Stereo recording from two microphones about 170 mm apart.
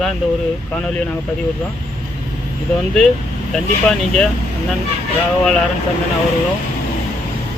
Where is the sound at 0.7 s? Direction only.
5° left (ahead or behind).